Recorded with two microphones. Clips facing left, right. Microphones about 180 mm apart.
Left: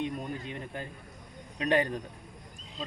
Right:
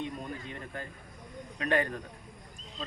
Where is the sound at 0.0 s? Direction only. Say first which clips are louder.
Left 3 dB; 20° left (ahead or behind).